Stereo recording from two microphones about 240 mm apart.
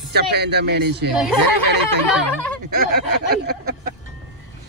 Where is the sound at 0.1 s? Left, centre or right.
Right.